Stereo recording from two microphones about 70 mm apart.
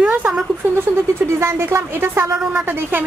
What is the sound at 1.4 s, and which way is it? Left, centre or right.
Speech, right.